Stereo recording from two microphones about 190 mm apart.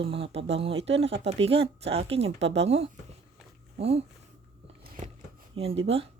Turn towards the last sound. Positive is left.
turn(degrees=-30)  # may be behind; listen again after turning